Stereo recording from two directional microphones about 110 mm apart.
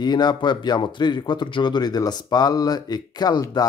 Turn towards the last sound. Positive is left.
turn(degrees=35)  # may be behind; listen again after turning